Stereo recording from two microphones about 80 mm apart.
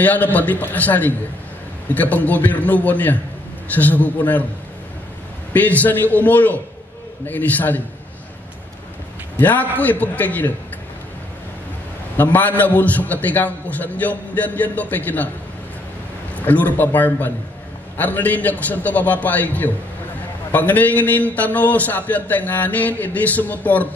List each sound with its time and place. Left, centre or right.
0.0 s a man's voice: left
5.5 s a man's voice: left
9.4 s a man's voice: left
12.2 s a man's voice: left
16.3 s a man's voice: left